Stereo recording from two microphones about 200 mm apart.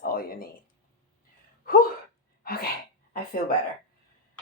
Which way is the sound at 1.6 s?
45° left (ahead or behind).